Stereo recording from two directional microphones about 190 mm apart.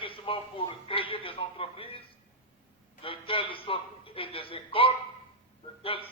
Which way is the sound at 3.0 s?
30° left (ahead or behind).